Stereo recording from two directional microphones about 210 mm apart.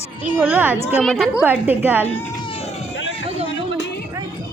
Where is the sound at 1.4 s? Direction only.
10° right (ahead or behind).